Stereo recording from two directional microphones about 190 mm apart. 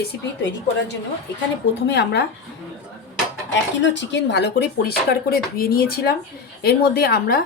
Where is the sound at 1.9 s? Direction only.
60° left (ahead or behind).